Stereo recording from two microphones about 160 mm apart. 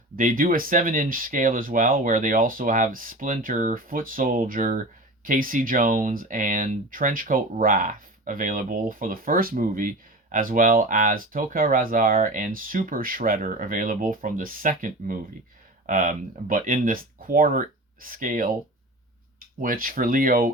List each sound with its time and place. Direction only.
0.2 s speech: 60° right (ahead or behind)
19.5 s speech: 60° right (ahead or behind)